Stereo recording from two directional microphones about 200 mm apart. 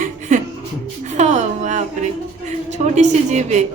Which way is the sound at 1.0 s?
35° right (ahead or behind).